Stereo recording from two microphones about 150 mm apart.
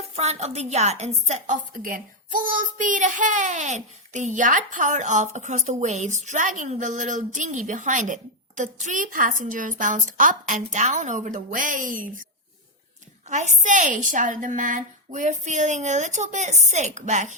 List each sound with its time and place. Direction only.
0.2 s a woman's voice: 45° right (ahead or behind); by 12.2 s 65° right (ahead or behind)
13.2 s a woman's voice: 55° right (ahead or behind)